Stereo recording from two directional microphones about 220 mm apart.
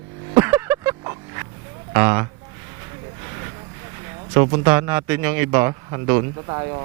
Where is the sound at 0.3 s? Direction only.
10° right (ahead or behind).